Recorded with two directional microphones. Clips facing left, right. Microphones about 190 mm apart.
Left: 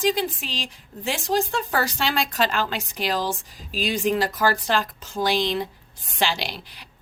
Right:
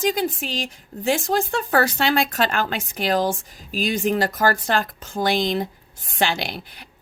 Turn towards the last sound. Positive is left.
turn(degrees=-55)  # may be behind; listen again after turning